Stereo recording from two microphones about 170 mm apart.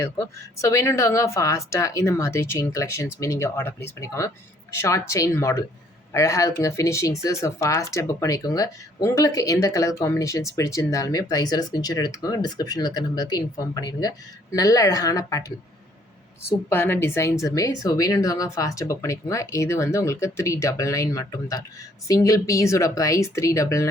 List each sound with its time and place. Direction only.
0.0 s a woman's voice: 15° left (ahead or behind)
16.6 s speech: 15° left (ahead or behind)